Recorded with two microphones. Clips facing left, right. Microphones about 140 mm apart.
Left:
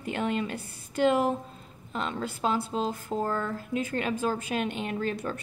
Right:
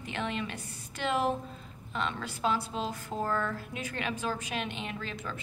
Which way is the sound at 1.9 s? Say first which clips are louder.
Left 3 dB; 40° left (ahead or behind).